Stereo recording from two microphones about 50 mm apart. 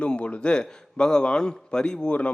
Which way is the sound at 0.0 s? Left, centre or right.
Left.